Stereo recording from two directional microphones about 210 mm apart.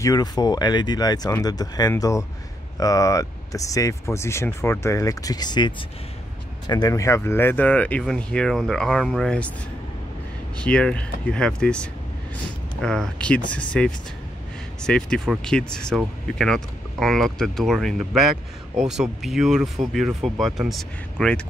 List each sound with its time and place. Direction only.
0.0 s speech: 20° left (ahead or behind)
10.6 s speech: 5° left (ahead or behind)